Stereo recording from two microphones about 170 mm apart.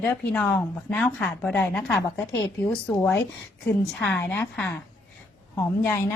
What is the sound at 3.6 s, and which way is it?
Speech, 10° left (ahead or behind).